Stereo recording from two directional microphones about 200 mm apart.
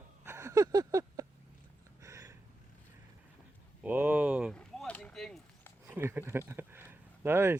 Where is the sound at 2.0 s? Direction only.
15° right (ahead or behind).